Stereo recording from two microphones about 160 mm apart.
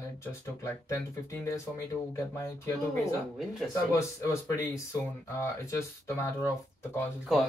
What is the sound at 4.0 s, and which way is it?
Speech, 20° left (ahead or behind).